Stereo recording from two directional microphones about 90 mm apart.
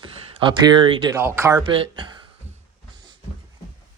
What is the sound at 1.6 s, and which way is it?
Speech, 70° right (ahead or behind).